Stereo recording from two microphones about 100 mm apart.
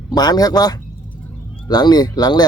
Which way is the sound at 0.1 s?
40° left (ahead or behind).